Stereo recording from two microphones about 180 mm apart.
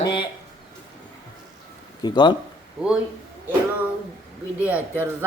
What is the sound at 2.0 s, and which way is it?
Speech, 25° left (ahead or behind).